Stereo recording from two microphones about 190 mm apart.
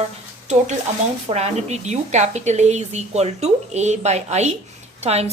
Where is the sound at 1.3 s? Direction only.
35° right (ahead or behind).